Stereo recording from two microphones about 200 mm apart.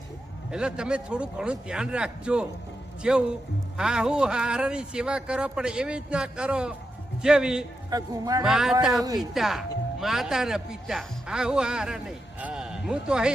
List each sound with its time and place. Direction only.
0.5 s speech: 5° right (ahead or behind)
7.9 s speech: 20° right (ahead or behind)
8.4 s speech: centre (ahead or behind)